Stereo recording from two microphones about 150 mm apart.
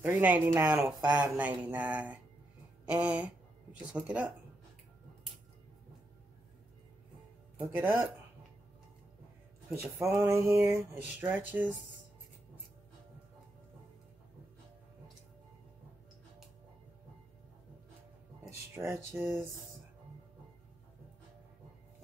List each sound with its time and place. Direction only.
0.0 s speech: 10° right (ahead or behind)
7.5 s speech: 15° right (ahead or behind)
9.8 s speech: 15° right (ahead or behind)
18.5 s speech: 20° right (ahead or behind)